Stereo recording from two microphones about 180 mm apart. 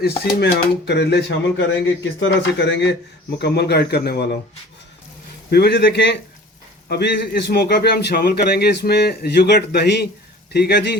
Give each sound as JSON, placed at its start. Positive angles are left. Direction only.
{"t": 0.0, "sound": "speech", "side_deg": 65}
{"t": 2.2, "sound": "speech", "side_deg": 80}
{"t": 3.3, "sound": "a man's voice", "side_deg": 65}
{"t": 5.5, "sound": "a man's voice", "side_deg": 65}